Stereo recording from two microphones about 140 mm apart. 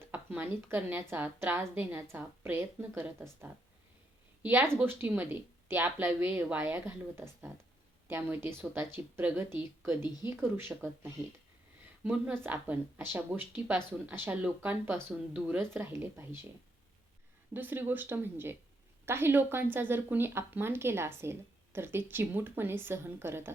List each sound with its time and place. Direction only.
0.0 s speech: 10° right (ahead or behind)
17.5 s speech: 15° right (ahead or behind)